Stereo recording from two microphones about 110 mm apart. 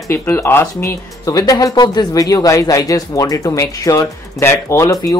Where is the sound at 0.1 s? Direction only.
20° left (ahead or behind).